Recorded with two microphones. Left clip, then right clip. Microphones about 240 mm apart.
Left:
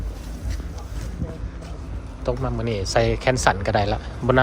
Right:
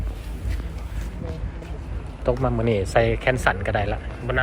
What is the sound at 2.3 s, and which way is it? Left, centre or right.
Speech, centre.